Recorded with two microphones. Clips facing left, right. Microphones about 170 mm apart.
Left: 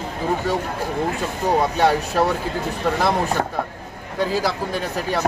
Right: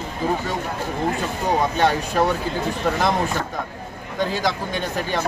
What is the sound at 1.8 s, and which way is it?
Speech, 5° left (ahead or behind).